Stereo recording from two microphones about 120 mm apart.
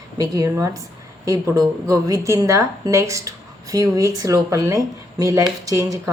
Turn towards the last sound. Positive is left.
turn(degrees=-25)  # may be behind; listen again after turning